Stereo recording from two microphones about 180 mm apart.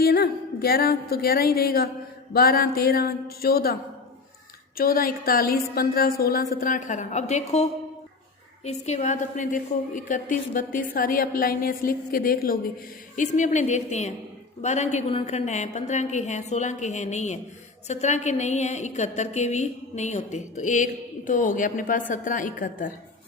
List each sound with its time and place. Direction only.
0.0 s speech: 55° left (ahead or behind)
4.8 s a woman's voice: 55° left (ahead or behind)